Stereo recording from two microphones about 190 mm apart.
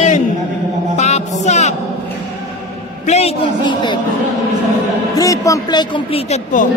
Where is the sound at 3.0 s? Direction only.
35° left (ahead or behind).